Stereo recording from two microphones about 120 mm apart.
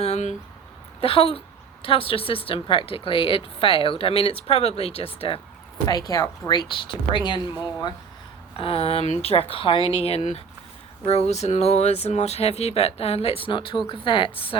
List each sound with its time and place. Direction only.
0.0 s speech: 70° left (ahead or behind)
1.0 s speech: 50° left (ahead or behind)
5.8 s speech: 30° left (ahead or behind)
6.5 s speech: 40° left (ahead or behind)
8.5 s speech: 55° left (ahead or behind)